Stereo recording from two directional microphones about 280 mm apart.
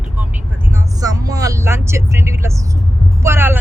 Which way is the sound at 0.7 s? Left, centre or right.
Centre.